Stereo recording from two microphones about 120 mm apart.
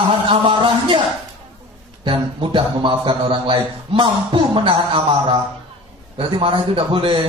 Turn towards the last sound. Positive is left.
turn(degrees=-45)  # may be behind; listen again after turning